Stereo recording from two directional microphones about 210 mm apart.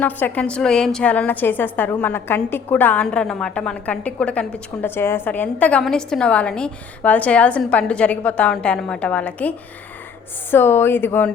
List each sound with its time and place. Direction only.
0.0 s a woman's voice: 5° left (ahead or behind)